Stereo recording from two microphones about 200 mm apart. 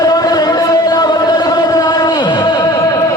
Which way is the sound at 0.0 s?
20° left (ahead or behind).